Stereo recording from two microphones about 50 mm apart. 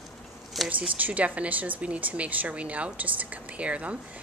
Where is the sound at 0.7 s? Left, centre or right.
Right.